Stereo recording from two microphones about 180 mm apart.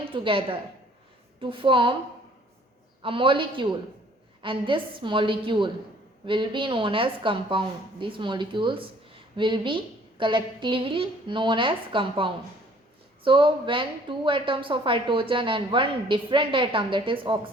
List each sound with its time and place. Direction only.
0.1 s a woman's voice: 30° right (ahead or behind)
3.0 s a woman's voice: 30° right (ahead or behind)